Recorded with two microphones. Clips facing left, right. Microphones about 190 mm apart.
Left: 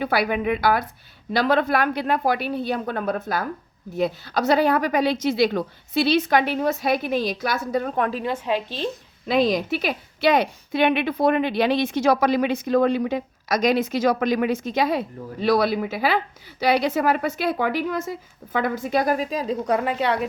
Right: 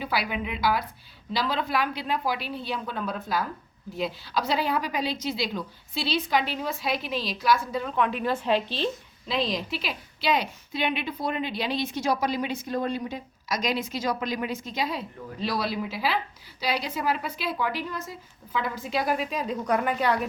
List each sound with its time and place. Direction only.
0.0 s a woman's voice: 55° left (ahead or behind)
8.3 s a woman's voice: 10° left (ahead or behind)
9.2 s a woman's voice: 55° left (ahead or behind)
16.6 s a woman's voice: 70° left (ahead or behind)
17.1 s a woman's voice: 55° left (ahead or behind); by 18.1 s 90° left
18.7 s a woman's voice: 50° left (ahead or behind); by 20.2 s 25° left (ahead or behind)